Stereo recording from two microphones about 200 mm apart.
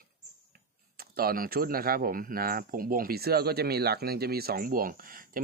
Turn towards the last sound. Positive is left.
turn(degrees=-45)  # may be behind; listen again after turning